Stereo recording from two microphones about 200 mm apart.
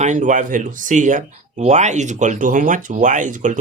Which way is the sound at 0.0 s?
40° right (ahead or behind).